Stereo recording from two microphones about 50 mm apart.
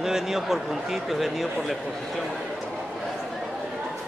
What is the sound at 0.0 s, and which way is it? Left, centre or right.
A man's voice, centre.